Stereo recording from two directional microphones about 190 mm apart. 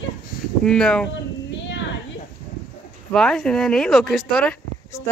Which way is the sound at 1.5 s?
70° left (ahead or behind).